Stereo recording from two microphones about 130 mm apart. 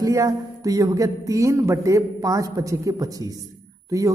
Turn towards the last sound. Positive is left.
turn(degrees=-25)  # may be behind; listen again after turning